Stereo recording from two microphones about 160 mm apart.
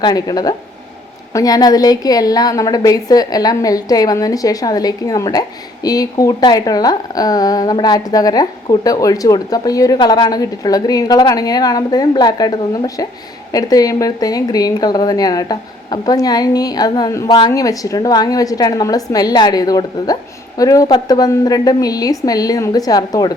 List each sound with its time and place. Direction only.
0.0 s a woman's voice: 25° left (ahead or behind)